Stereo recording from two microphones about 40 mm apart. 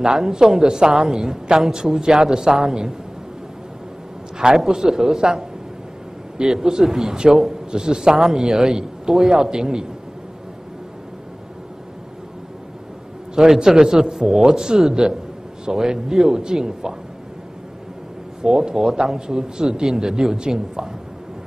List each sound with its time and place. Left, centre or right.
0.0 s a man's voice: centre
4.6 s a man's voice: centre
13.3 s a man's voice: centre
18.4 s a man's voice: centre